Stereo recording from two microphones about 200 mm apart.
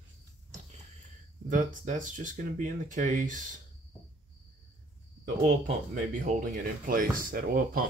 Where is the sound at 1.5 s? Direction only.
40° right (ahead or behind).